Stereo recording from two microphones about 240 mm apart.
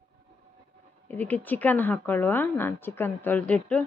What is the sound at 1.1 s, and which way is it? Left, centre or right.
A woman's voice, centre.